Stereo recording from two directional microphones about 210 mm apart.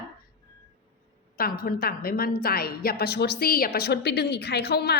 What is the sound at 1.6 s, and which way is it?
A woman's voice, 45° left (ahead or behind).